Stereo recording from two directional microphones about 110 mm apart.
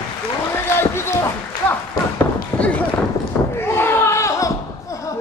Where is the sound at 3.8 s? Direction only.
25° left (ahead or behind).